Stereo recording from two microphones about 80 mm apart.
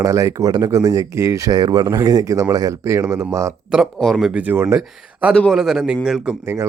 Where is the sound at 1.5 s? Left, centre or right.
Right.